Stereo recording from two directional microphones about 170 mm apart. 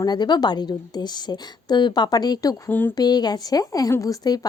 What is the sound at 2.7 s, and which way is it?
Speech, 10° left (ahead or behind).